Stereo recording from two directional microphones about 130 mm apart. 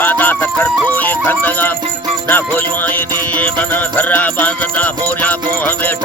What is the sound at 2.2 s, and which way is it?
Music, 15° left (ahead or behind).